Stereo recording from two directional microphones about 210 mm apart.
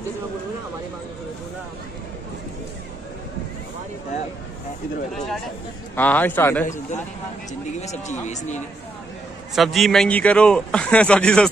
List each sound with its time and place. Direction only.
5.1 s a man's voice: centre (ahead or behind)
6.6 s speech: 35° left (ahead or behind)
9.6 s a man's voice: centre (ahead or behind)